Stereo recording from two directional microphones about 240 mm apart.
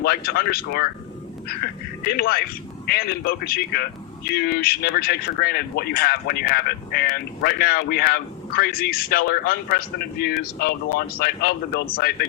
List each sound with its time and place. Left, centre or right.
0.0 s speech: left
2.0 s speech: left